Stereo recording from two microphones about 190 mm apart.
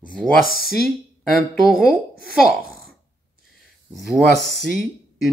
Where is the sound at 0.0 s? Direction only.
5° left (ahead or behind).